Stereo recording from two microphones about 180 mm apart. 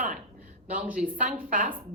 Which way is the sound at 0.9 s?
50° right (ahead or behind).